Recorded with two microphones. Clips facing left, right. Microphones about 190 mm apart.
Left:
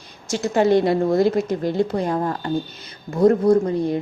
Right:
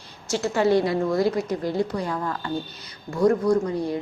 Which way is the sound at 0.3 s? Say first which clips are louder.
Left 3 dB; 15° left (ahead or behind).